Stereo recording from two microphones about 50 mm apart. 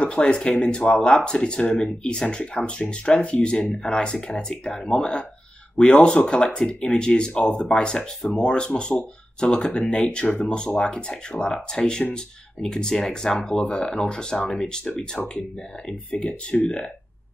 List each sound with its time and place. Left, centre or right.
0.0 s speech: left